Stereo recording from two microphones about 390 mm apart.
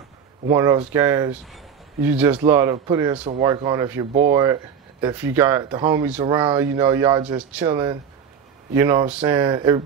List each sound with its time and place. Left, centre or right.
0.5 s speech: centre